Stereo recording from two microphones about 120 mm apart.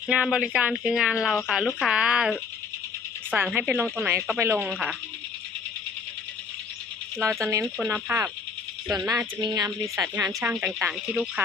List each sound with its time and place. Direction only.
0.1 s speech: 10° right (ahead or behind)
7.2 s speech: 20° right (ahead or behind)
8.9 s speech: 30° right (ahead or behind)
10.4 s speech: 10° right (ahead or behind)